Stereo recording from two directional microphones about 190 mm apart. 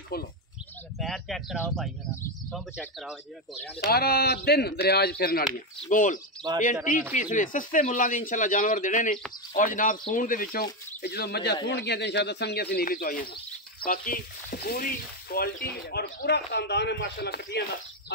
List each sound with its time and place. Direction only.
0.1 s speech: 55° left (ahead or behind)
0.9 s speech: centre (ahead or behind)
3.8 s speech: 55° left (ahead or behind)
5.9 s a man's voice: 45° left (ahead or behind)
7.2 s a man's voice: 45° left (ahead or behind)